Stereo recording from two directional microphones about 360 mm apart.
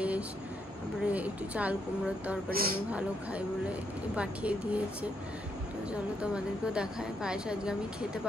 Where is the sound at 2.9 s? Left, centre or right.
Centre.